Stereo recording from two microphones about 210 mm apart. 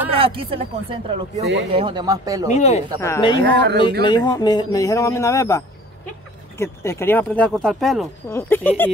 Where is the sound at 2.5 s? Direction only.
30° left (ahead or behind).